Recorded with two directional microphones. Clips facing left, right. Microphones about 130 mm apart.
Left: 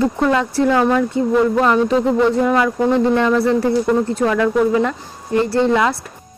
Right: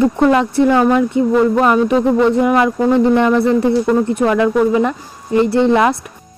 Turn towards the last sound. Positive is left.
turn(degrees=-20)  # may be behind; listen again after turning